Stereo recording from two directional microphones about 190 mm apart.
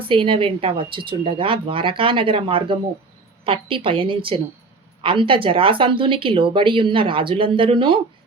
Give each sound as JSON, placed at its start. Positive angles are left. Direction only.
{"t": 0.0, "sound": "speech", "side_deg": -25}